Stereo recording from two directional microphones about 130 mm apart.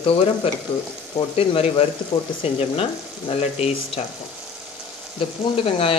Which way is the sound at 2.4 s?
50° left (ahead or behind).